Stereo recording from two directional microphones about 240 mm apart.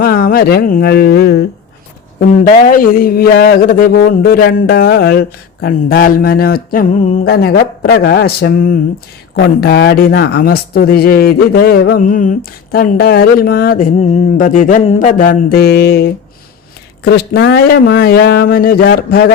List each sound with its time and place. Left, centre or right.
0.0 s speech: left